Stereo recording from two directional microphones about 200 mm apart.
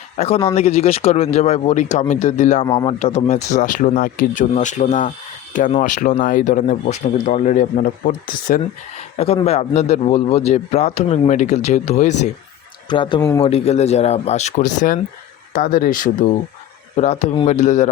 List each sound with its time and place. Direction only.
0.2 s a man's voice: 30° left (ahead or behind)
2.6 s speech: 20° left (ahead or behind)
3.0 s a man's voice: 35° left (ahead or behind)
9.1 s a man's voice: 30° left (ahead or behind)
12.9 s speech: 25° left (ahead or behind)
13.4 s a man's voice: 30° left (ahead or behind)
16.9 s a man's voice: 30° left (ahead or behind)